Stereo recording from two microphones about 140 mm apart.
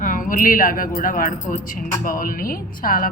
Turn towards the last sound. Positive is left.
turn(degrees=85)